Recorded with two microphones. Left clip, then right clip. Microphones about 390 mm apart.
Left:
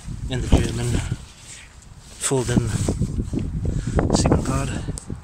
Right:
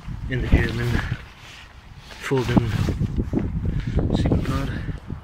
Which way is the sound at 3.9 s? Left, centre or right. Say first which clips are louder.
Left 5 dB; left.